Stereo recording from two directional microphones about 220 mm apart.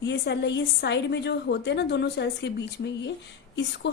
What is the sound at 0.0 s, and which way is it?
A woman's voice, 50° left (ahead or behind).